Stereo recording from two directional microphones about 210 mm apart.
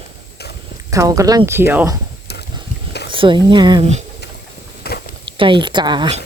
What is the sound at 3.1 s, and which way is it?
Speech, 25° right (ahead or behind).